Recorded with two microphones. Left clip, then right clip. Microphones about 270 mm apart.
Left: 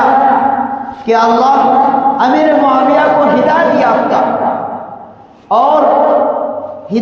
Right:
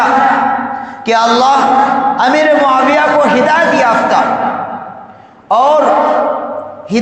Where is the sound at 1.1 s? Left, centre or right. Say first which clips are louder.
Even; right.